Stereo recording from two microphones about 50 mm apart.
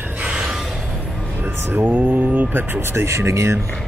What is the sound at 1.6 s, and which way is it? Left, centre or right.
Speech, right.